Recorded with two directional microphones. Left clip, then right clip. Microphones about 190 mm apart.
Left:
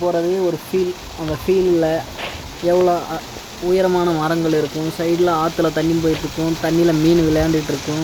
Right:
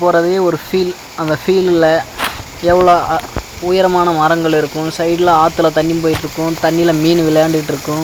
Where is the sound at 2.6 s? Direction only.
Centre (ahead or behind).